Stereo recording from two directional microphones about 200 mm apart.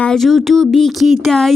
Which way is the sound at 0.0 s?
Centre (ahead or behind).